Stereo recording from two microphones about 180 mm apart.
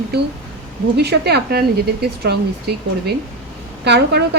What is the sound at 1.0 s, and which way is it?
A woman's voice, 65° right (ahead or behind).